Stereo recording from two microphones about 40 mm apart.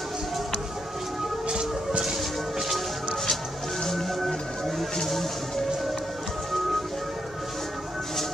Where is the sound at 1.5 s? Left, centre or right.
Right.